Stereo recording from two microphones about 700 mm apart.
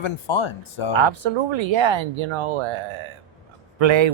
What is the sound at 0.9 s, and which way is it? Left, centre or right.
Speech, right.